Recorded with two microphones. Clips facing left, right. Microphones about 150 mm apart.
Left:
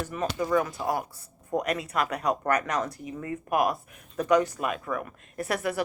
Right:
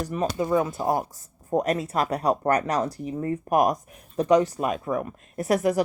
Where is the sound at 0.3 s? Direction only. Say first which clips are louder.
Right 1 dB; 25° right (ahead or behind).